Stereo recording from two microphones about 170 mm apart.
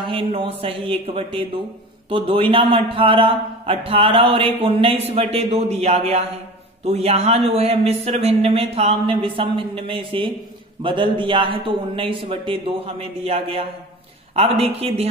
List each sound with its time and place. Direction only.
0.1 s a man's voice: 30° right (ahead or behind)